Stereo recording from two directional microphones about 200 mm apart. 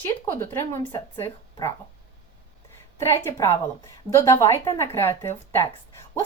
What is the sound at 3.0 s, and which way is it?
Speech, 15° left (ahead or behind).